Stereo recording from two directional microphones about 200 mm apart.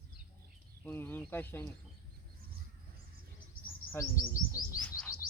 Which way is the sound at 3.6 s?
45° left (ahead or behind).